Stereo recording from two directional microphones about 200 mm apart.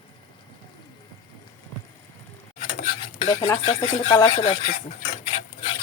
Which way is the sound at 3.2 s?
20° left (ahead or behind).